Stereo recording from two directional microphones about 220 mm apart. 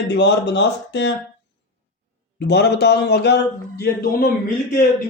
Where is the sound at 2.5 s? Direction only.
50° left (ahead or behind).